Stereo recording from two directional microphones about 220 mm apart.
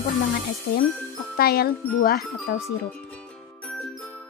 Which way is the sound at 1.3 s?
45° left (ahead or behind).